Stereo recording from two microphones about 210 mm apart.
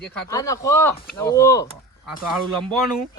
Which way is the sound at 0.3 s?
15° left (ahead or behind).